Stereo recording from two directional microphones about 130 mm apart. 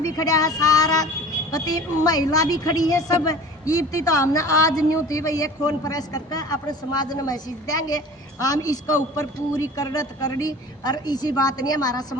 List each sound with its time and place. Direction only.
0.0 s a woman's voice: 30° left (ahead or behind)